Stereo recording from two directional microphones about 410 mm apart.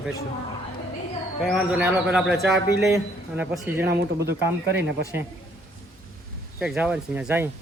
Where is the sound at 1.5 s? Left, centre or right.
Centre.